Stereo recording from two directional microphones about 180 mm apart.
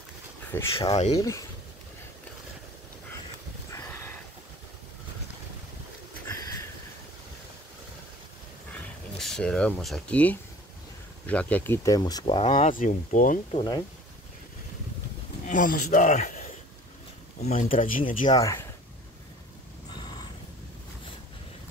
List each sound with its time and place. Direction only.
0.7 s speech: 35° left (ahead or behind)
1.1 s speech: 20° left (ahead or behind)
6.2 s a sound: 20° left (ahead or behind)
9.2 s speech: 5° left (ahead or behind); by 12.4 s 25° left (ahead or behind)
12.4 s speech: 40° left (ahead or behind)
13.5 s speech: 25° left (ahead or behind)
15.4 s speech: 45° left (ahead or behind)
18.3 s speech: 20° left (ahead or behind)